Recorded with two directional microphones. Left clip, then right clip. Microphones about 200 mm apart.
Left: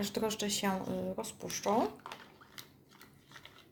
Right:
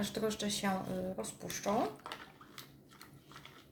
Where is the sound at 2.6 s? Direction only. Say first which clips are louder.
Left 2 dB; 10° left (ahead or behind).